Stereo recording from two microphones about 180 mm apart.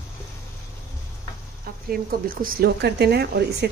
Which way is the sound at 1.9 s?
55° right (ahead or behind).